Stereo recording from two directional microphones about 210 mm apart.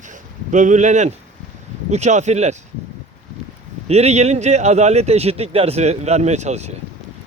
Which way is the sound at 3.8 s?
30° right (ahead or behind).